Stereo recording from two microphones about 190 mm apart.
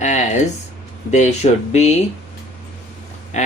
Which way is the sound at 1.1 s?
35° left (ahead or behind).